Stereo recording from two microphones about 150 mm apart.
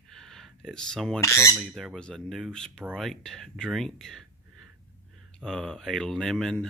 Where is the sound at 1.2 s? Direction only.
20° left (ahead or behind).